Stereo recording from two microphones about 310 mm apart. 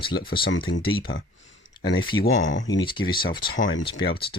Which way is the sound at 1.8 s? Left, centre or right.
Left.